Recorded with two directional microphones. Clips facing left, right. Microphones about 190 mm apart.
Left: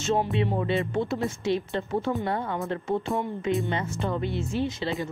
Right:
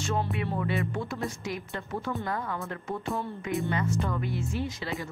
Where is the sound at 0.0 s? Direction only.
20° left (ahead or behind).